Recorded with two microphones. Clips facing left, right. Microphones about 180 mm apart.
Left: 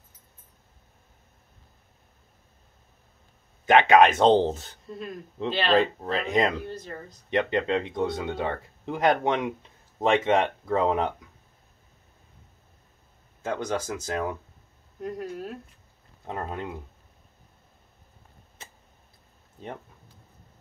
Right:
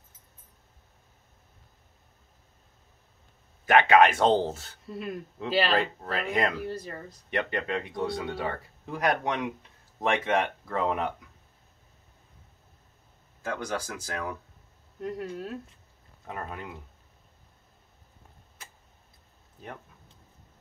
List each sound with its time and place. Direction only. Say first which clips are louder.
3.6 s speech: left 2 dB; 20° left (ahead or behind)
6.6 s speech: right 2 dB; 5° right (ahead or behind)
7.2 s speech: left 6 dB; 20° left (ahead or behind)
13.4 s speech: left 4 dB; 20° left (ahead or behind)
15.0 s speech: left 1 dB; centre (ahead or behind)
16.3 s speech: left 5 dB; 25° left (ahead or behind)